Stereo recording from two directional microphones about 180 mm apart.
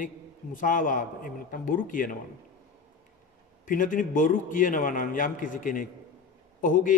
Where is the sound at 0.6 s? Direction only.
50° left (ahead or behind).